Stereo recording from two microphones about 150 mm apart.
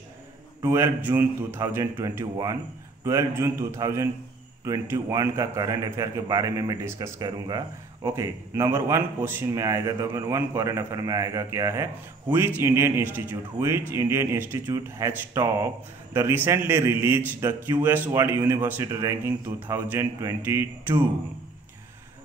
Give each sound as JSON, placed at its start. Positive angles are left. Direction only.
{"t": 0.6, "sound": "a man's voice", "side_deg": -15}